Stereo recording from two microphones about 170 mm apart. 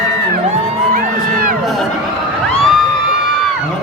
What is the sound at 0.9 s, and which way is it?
Music, 55° right (ahead or behind).